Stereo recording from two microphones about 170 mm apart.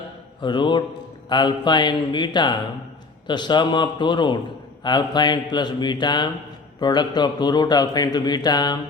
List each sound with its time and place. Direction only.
0.4 s speech: 25° left (ahead or behind)